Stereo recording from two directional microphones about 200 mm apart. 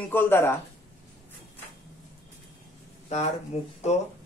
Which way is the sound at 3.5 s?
30° left (ahead or behind).